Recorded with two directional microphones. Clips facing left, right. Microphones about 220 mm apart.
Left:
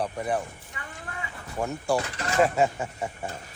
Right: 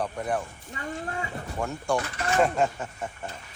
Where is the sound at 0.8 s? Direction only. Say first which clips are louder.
Right 8 dB; 35° right (ahead or behind).